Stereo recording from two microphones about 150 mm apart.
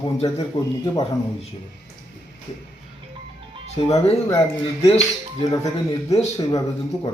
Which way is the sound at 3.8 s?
45° left (ahead or behind).